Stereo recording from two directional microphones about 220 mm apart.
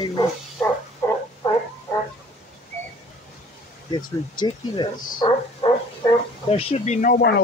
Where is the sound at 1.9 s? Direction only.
10° left (ahead or behind).